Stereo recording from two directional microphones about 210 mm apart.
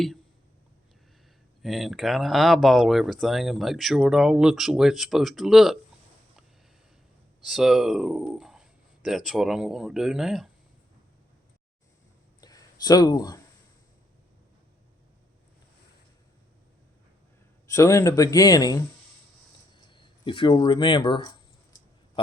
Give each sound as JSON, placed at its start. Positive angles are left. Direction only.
{"t": 1.6, "sound": "speech", "side_deg": 0}
{"t": 7.4, "sound": "speech", "side_deg": 0}
{"t": 12.4, "sound": "a sound", "side_deg": 20}
{"t": 17.7, "sound": "speech", "side_deg": 15}